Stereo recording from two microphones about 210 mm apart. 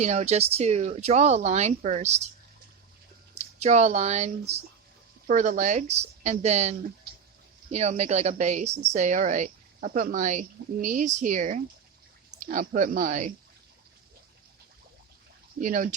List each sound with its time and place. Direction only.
0.0 s speech: 30° right (ahead or behind)
3.3 s speech: 35° right (ahead or behind)
15.6 s speech: 40° right (ahead or behind)